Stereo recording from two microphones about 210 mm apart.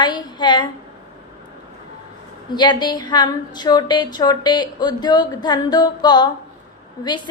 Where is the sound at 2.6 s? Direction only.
20° left (ahead or behind).